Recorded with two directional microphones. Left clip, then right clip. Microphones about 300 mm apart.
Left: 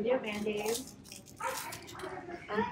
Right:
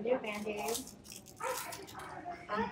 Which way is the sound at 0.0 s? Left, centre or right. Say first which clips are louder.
Left 3 dB; centre.